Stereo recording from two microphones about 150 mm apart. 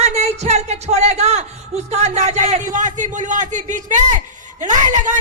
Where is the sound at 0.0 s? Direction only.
45° right (ahead or behind).